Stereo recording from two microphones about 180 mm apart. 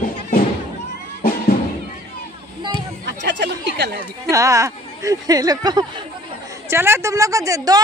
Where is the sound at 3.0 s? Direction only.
80° right.